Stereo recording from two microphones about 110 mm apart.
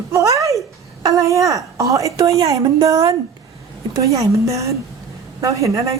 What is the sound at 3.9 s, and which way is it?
A woman's voice, 30° right (ahead or behind).